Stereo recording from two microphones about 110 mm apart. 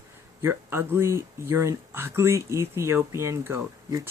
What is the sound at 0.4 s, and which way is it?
Speech, 20° right (ahead or behind).